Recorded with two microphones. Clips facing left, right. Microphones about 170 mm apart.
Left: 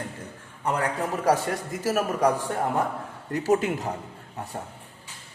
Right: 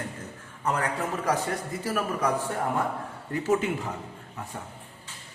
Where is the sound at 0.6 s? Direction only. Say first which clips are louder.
Left 2 dB; 30° left (ahead or behind).